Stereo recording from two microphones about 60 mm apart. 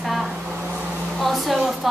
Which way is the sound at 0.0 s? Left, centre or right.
Centre.